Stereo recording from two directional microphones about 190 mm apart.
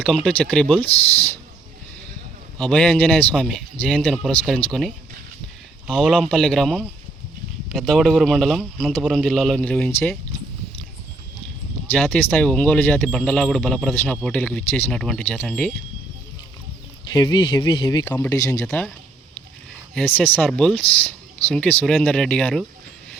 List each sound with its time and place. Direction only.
0.0 s speech: 5° left (ahead or behind)
2.6 s speech: 5° left (ahead or behind)
11.9 s speech: 5° left (ahead or behind)
17.2 s speech: 25° left (ahead or behind); by 22.6 s 5° left (ahead or behind)